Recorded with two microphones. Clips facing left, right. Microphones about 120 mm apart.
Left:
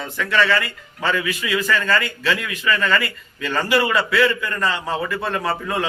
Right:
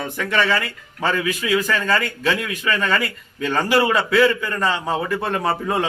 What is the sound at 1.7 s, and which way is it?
Speech, 15° right (ahead or behind).